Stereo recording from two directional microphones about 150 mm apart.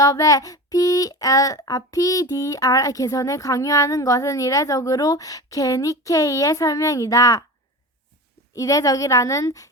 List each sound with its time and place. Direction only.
0.0 s child singing: 20° left (ahead or behind)
8.5 s child singing: 20° left (ahead or behind)